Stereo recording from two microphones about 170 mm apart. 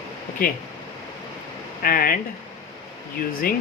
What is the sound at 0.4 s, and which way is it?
Speech, 55° left (ahead or behind).